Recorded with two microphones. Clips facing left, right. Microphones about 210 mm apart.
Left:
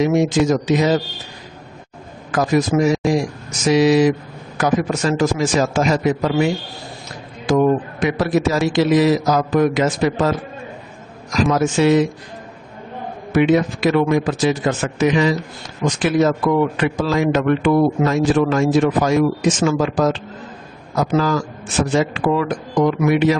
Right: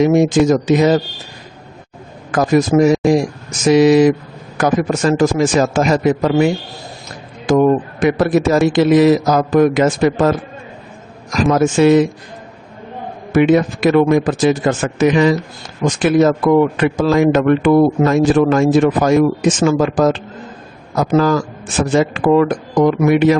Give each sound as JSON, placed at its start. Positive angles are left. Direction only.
{"t": 0.0, "sound": "speech", "side_deg": -50}
{"t": 2.3, "sound": "speech", "side_deg": -50}
{"t": 11.5, "sound": "speech", "side_deg": -50}
{"t": 13.3, "sound": "speech", "side_deg": -50}